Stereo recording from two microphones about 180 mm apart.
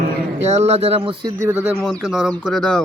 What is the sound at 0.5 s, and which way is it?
Speech, 35° right (ahead or behind).